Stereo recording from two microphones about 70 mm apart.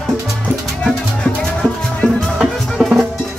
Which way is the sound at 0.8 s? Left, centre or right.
Centre.